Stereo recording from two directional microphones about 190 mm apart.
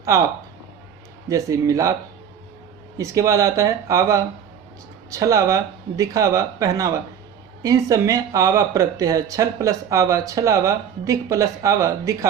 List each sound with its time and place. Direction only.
1.3 s speech: 15° right (ahead or behind)
3.0 s speech: 15° right (ahead or behind)